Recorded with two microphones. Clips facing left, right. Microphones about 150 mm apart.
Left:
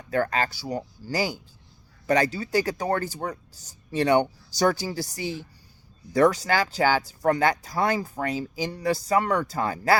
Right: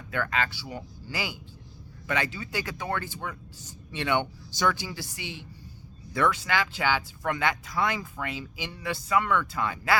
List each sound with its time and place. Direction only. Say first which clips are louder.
0.1 s speech: left 5 dB; 35° left (ahead or behind)